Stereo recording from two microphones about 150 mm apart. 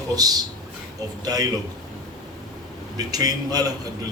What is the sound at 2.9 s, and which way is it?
Speech, 25° right (ahead or behind).